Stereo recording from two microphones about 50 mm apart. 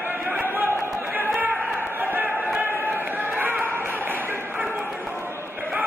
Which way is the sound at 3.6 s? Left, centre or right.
Right.